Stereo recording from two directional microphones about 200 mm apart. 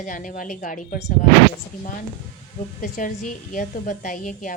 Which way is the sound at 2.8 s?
40° left (ahead or behind).